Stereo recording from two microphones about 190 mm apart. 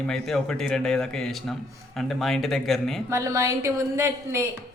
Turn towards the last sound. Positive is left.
turn(degrees=-15)  # may be behind; listen again after turning